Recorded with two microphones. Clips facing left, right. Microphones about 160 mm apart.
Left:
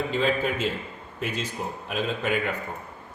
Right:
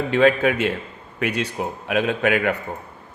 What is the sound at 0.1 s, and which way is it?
A man's voice, 75° right (ahead or behind).